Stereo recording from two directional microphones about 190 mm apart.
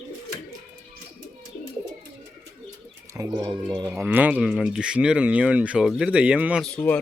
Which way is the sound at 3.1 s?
20° right (ahead or behind).